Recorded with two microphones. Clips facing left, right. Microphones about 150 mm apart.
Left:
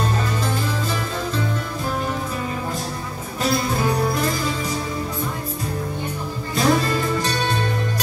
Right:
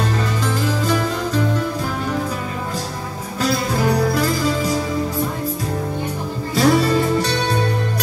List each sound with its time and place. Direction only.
3.4 s music: 90° right
6.5 s music: 85° right